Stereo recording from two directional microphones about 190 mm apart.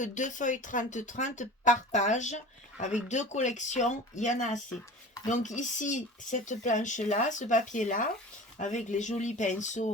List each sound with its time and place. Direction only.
0.0 s speech: 40° left (ahead or behind)